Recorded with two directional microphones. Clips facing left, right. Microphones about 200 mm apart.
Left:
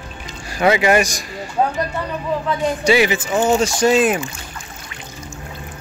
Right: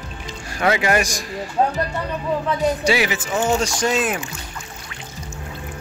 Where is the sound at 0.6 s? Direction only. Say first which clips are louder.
Left 4 dB; 5° left (ahead or behind).